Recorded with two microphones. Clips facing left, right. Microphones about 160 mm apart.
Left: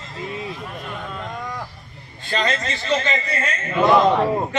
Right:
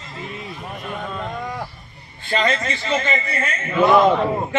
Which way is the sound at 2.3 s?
55° right (ahead or behind).